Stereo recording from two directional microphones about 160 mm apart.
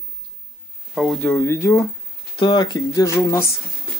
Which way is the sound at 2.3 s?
30° left (ahead or behind).